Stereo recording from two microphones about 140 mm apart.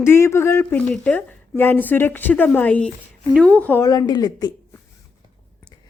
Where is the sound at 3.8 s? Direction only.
30° left (ahead or behind).